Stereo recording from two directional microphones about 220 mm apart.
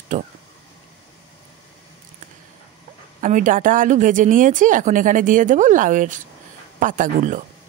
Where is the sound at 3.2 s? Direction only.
35° right (ahead or behind).